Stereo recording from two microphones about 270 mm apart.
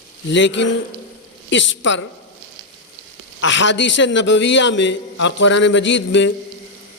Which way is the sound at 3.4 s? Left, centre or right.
Left.